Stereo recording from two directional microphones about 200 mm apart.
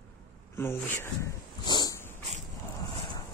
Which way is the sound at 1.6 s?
20° left (ahead or behind).